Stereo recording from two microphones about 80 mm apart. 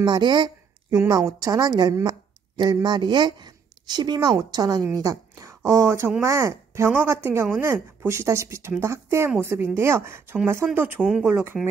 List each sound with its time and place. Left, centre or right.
0.0 s a woman's voice: right